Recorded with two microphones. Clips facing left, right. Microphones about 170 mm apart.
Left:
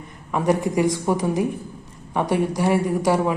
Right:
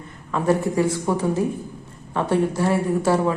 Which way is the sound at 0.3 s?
15° left (ahead or behind).